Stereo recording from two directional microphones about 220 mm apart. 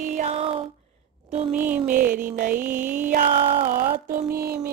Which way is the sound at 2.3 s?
40° right (ahead or behind).